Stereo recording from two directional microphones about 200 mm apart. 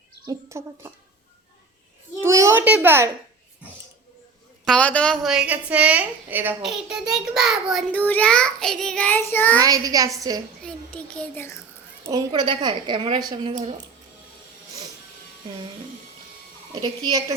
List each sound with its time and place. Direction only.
0.3 s a child's voice: 15° right (ahead or behind)
2.2 s a child's voice: 15° right (ahead or behind)
4.6 s a woman's voice: 5° left (ahead or behind)
9.6 s a child's voice: 20° right (ahead or behind)
10.6 s a woman's voice: 5° left (ahead or behind)
12.0 s a woman's voice: 20° right (ahead or behind)
17.1 s a child's voice: 15° right (ahead or behind)